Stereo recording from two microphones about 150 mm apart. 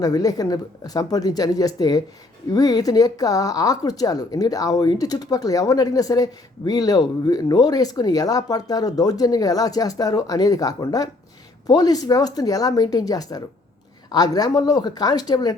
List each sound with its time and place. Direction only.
0.0 s speech: 25° left (ahead or behind)